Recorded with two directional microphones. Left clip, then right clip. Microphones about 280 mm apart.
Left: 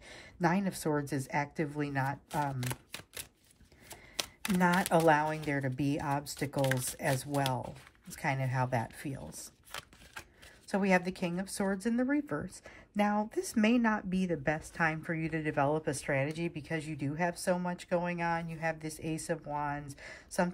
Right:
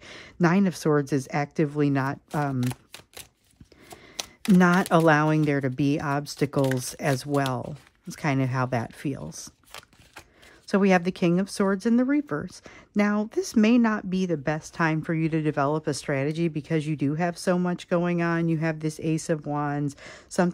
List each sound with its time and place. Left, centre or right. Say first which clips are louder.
0.0 s a sound: right 7 dB; centre
0.8 s speech: right 10 dB; centre
2.6 s shuffling cards: right 7 dB; centre
3.9 s a sound: right 2 dB; centre
4.9 s speech: right 7 dB; centre
6.6 s speech: right 2 dB; centre
7.3 s speech: right 10 dB; right
7.6 s speech: right 6 dB; centre
8.2 s speech: right 7 dB; centre
9.3 s shuffling cards: right 4 dB; centre
10.7 s speech: right 8 dB; centre